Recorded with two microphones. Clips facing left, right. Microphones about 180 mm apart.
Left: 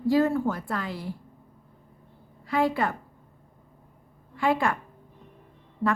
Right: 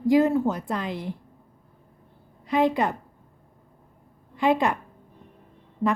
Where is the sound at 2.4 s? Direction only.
20° right (ahead or behind).